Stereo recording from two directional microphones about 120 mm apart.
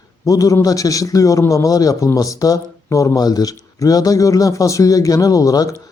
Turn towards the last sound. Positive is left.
turn(degrees=30)  # may be behind; listen again after turning